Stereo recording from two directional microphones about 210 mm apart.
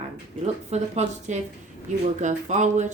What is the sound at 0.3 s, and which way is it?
Speech, 30° right (ahead or behind).